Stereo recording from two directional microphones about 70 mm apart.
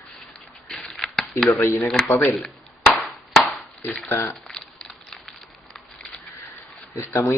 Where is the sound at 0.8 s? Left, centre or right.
Centre.